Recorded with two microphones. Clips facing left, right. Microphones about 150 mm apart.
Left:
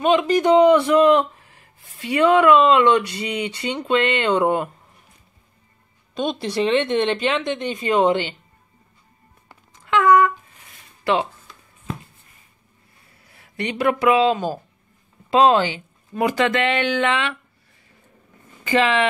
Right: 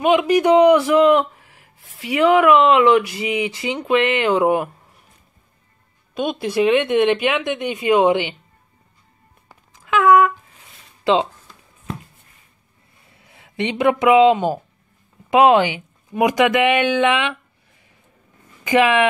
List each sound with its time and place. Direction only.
0.0 s speech: 10° right (ahead or behind)
6.4 s speech: 10° right (ahead or behind)
9.5 s a sound: 10° right (ahead or behind)
13.1 s speech: 20° right (ahead or behind)
18.6 s speech: 10° right (ahead or behind)